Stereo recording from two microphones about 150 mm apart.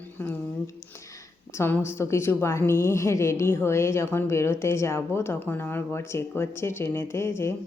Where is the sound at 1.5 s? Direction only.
15° left (ahead or behind).